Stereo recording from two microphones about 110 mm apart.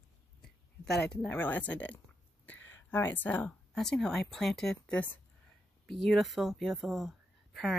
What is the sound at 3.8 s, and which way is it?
Speech, 5° left (ahead or behind).